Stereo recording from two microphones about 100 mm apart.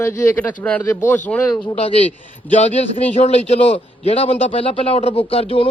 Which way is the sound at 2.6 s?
90° left.